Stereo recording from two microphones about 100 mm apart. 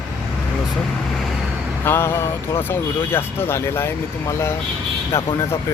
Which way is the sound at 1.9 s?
25° left (ahead or behind).